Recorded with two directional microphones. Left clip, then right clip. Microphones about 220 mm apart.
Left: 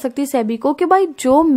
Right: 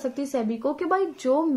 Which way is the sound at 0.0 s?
45° left (ahead or behind).